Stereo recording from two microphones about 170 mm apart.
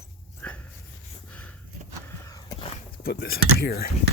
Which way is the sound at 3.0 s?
65° left (ahead or behind).